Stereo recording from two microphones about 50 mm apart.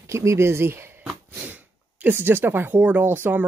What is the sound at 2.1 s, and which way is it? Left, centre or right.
Speech, right.